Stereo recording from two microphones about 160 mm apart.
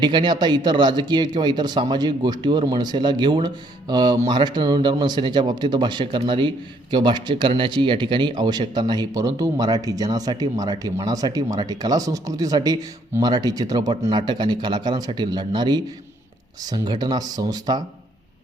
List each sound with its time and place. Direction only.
0.0 s speech: 30° right (ahead or behind)